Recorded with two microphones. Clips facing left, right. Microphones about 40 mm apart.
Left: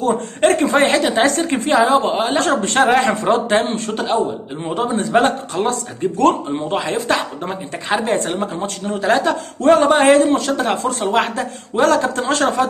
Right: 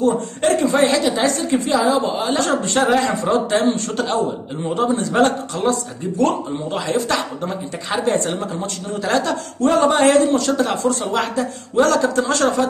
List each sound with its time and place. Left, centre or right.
0.0 s a woman's voice: left
8.4 s speech: left